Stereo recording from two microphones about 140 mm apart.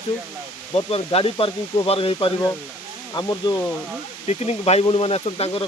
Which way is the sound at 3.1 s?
30° left (ahead or behind).